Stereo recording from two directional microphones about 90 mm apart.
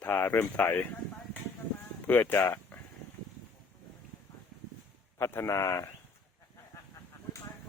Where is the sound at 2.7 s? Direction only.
15° left (ahead or behind).